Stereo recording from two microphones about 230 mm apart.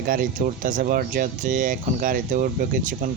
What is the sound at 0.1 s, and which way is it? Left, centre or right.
Speech, right.